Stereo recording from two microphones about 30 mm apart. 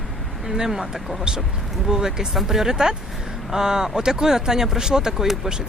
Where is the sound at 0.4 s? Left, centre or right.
Centre.